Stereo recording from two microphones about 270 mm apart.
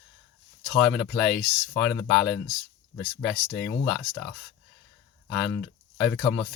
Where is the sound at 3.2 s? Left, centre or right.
Left.